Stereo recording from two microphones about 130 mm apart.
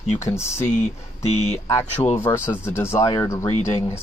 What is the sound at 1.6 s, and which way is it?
Speech, 20° left (ahead or behind).